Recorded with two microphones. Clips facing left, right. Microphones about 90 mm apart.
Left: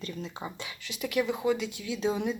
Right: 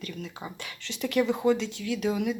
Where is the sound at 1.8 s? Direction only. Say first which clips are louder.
Right 2 dB; 20° left (ahead or behind).